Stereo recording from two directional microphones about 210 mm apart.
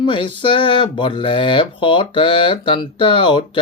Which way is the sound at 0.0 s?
25° left (ahead or behind).